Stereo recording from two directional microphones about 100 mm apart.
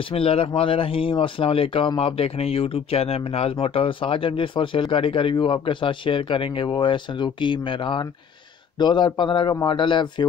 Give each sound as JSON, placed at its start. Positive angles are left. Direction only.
{"t": 0.1, "sound": "a man's voice", "side_deg": 75}